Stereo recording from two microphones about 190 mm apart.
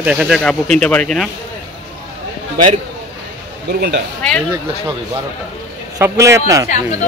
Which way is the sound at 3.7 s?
60° right (ahead or behind).